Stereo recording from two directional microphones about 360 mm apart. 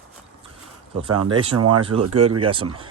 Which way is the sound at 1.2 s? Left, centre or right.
Centre.